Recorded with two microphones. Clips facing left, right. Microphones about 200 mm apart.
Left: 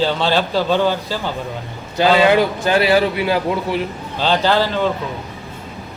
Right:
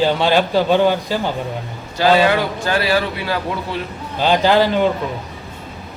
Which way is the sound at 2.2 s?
20° left (ahead or behind).